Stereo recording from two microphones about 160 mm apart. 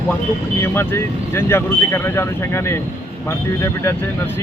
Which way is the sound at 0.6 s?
15° left (ahead or behind).